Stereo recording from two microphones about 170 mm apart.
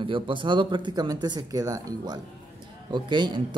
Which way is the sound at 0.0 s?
30° right (ahead or behind).